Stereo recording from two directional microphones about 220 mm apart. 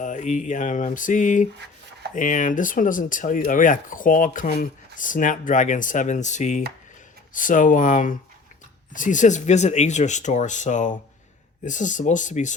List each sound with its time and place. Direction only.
0.0 s speech: 35° left (ahead or behind)